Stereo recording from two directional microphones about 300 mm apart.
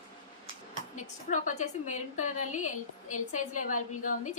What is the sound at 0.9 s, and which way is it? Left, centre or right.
A woman's voice, left.